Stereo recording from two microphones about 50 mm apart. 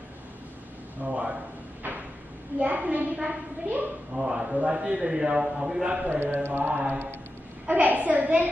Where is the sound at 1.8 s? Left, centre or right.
Right.